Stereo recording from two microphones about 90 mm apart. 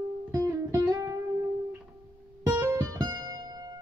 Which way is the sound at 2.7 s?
50° right (ahead or behind).